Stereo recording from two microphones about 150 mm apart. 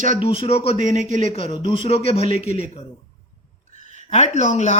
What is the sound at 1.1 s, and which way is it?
Speech, 55° right (ahead or behind).